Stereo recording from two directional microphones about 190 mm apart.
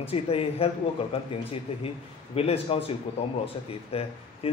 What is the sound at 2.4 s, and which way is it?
Speech, 30° left (ahead or behind).